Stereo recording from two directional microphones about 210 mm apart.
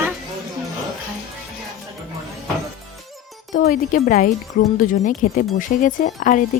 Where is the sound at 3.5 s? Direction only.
40° left (ahead or behind).